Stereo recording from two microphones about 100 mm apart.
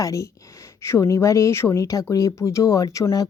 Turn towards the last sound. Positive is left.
turn(degrees=35)  # may be behind; listen again after turning